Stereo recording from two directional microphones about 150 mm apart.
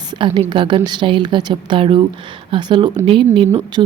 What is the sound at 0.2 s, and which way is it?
Speech, 35° right (ahead or behind).